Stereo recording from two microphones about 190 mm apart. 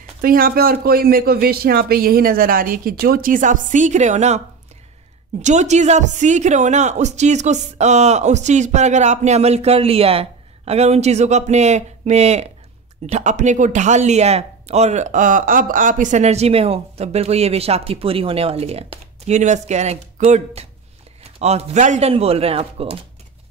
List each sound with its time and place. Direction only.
0.2 s a man's voice: 50° right (ahead or behind)
5.4 s speech: 40° right (ahead or behind)